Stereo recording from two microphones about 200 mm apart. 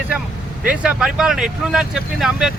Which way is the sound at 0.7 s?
5° right (ahead or behind).